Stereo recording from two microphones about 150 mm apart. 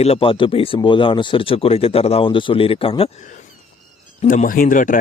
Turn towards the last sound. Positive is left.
turn(degrees=60)  # may be behind; listen again after turning